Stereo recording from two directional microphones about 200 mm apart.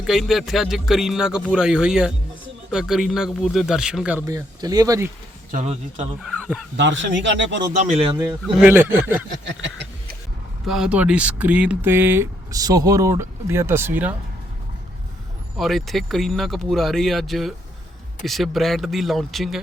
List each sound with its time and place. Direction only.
0.0 s a man's voice: centre (ahead or behind)
4.3 s speech: 15° right (ahead or behind)
5.5 s speech: 35° right (ahead or behind)
6.2 s speech: centre (ahead or behind)
6.7 s speech: 65° right (ahead or behind)
7.9 s speech: 30° right (ahead or behind)
8.6 s speech: 10° right (ahead or behind)
9.5 s a sound: 65° right (ahead or behind)
10.7 s speech: 5° right (ahead or behind)
15.5 s a man's voice: centre (ahead or behind)